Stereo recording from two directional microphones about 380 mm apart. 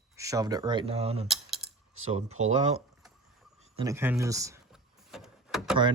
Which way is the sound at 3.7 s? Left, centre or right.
Centre.